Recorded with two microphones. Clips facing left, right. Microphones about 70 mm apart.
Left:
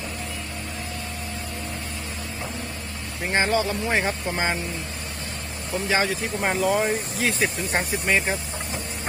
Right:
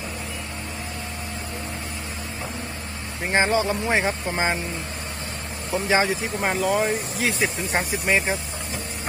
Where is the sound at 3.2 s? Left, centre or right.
Right.